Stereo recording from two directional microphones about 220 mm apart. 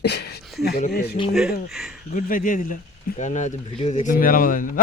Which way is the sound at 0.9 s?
45° left (ahead or behind).